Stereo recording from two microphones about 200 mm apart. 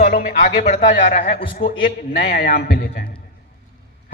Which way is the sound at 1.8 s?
50° left (ahead or behind).